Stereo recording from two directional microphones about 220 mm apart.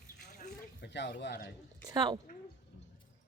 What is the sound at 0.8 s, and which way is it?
Speech, 50° left (ahead or behind).